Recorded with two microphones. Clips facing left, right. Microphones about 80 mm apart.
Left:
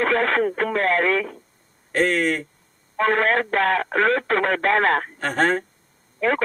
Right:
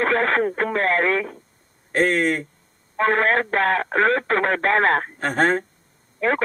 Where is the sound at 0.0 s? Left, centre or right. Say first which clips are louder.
Even; right.